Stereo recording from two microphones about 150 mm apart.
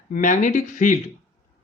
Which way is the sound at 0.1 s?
55° left (ahead or behind).